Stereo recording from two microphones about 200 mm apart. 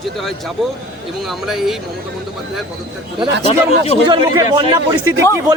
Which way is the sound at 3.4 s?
30° left (ahead or behind).